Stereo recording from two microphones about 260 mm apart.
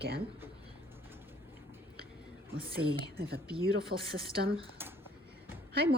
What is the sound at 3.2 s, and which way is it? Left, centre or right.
Speech, right.